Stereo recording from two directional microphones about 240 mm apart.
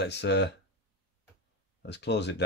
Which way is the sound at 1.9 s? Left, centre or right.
Left.